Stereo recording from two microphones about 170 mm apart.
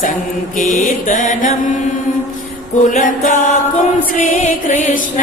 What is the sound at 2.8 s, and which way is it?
Music, 50° left (ahead or behind).